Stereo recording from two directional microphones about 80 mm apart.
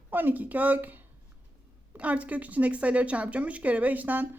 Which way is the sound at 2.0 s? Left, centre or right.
Centre.